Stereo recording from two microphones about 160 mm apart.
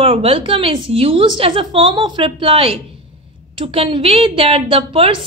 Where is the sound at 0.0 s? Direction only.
35° right (ahead or behind).